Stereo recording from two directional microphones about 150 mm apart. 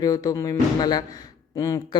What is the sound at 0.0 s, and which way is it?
Speech, 25° left (ahead or behind).